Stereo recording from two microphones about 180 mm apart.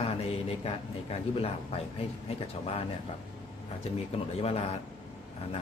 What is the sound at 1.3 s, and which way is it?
Speech, 35° left (ahead or behind).